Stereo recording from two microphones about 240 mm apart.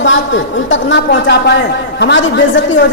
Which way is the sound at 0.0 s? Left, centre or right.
Left.